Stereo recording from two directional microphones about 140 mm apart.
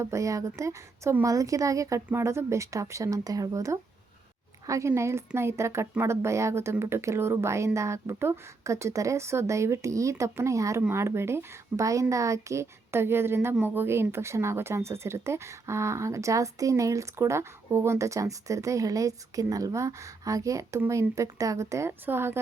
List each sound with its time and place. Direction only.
0.0 s speech: 20° right (ahead or behind)